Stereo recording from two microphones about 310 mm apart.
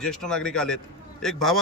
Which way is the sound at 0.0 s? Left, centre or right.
Centre.